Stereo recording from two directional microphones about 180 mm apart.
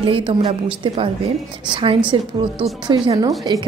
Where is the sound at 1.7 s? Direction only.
30° right (ahead or behind).